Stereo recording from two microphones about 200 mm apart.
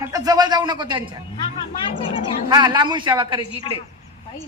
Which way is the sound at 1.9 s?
25° left (ahead or behind).